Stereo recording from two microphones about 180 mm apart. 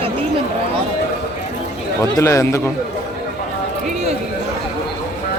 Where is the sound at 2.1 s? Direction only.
20° left (ahead or behind).